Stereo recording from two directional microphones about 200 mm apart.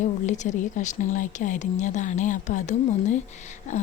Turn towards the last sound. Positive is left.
turn(degrees=35)  # may be behind; listen again after turning